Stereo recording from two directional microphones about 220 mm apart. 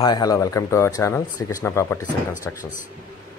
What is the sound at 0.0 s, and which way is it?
Speech, 20° left (ahead or behind).